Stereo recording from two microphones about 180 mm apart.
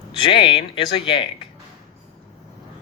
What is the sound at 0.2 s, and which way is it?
Speech, 30° left (ahead or behind).